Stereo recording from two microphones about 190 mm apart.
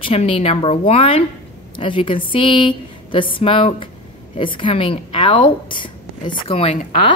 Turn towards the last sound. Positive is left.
turn(degrees=30)  # may be behind; listen again after turning